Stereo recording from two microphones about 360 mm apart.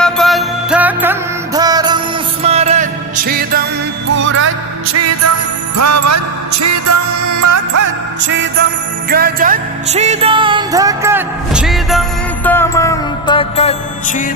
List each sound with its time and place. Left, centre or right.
0.0 s music: centre; by 7.8 s right
8.3 s music: right; by 14.3 s centre